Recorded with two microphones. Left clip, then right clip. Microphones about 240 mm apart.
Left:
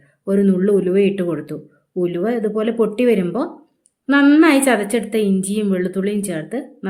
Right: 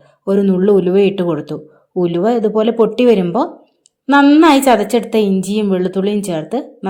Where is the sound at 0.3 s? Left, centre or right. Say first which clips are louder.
Right 4 dB; centre.